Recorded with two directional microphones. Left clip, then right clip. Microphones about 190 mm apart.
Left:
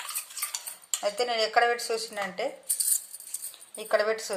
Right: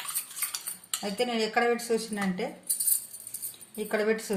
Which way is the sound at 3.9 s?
40° left (ahead or behind).